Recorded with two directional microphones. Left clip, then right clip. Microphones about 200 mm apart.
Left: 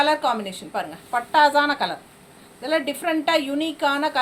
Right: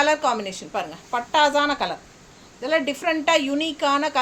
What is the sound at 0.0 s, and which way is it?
A woman's voice, 25° right (ahead or behind).